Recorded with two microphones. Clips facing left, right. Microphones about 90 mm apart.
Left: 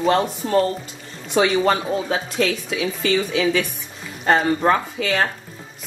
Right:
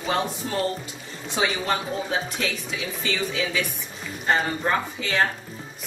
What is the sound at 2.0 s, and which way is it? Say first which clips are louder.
A woman's voice: left 6 dB; 80° left.